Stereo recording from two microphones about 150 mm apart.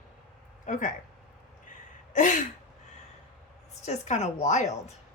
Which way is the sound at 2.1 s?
55° left (ahead or behind).